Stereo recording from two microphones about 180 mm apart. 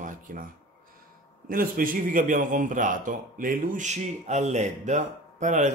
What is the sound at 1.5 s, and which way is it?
A man's voice, 50° right (ahead or behind).